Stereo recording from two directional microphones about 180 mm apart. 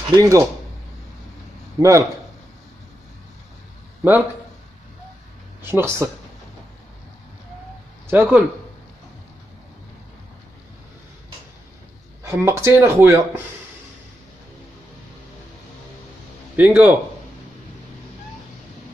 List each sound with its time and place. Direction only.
0.1 s speech: 20° right (ahead or behind)
1.8 s speech: 15° right (ahead or behind)
5.6 s speech: 15° right (ahead or behind)
8.1 s speech: 10° right (ahead or behind)
12.2 s speech: 15° right (ahead or behind)
16.5 s speech: 10° right (ahead or behind)